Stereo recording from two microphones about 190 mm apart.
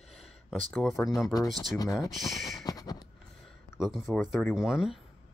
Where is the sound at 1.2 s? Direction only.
20° left (ahead or behind).